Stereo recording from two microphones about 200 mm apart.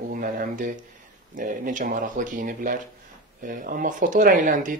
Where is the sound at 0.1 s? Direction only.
45° right (ahead or behind).